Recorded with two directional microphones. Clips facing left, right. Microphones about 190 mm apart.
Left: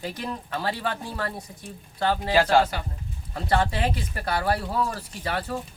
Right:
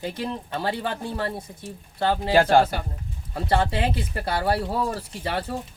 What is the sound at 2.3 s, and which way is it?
Speech, 50° right (ahead or behind).